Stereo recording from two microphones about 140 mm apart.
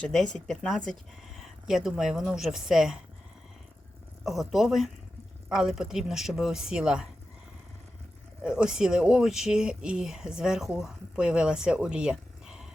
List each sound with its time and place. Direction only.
0.0 s speech: 5° left (ahead or behind)
4.3 s speech: centre (ahead or behind)
8.4 s speech: 5° right (ahead or behind)